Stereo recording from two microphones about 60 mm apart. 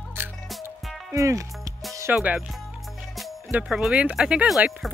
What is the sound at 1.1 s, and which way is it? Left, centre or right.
Speech, right.